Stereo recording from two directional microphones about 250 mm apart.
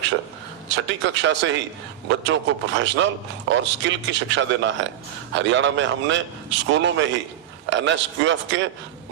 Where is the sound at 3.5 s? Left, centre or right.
Right.